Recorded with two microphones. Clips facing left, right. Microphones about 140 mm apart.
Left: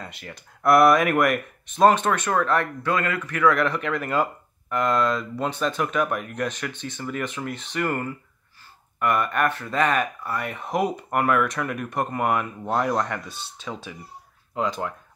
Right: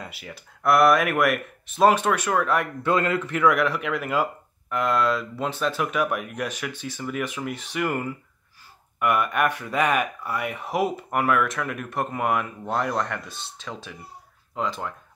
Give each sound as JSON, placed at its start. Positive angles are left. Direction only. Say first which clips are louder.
{"t": 0.0, "sound": "speech", "louder": "even", "side_deg": -5}
{"t": 2.8, "sound": "a man's voice", "louder": "right 2 dB", "side_deg": -25}
{"t": 3.5, "sound": "speech", "louder": "even", "side_deg": -5}